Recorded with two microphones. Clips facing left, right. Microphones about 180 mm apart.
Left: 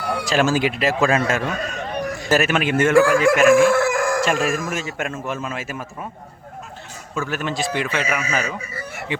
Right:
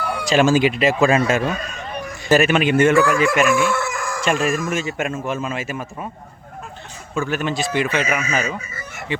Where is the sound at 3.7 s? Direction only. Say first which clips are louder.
Left 6 dB; 90° left.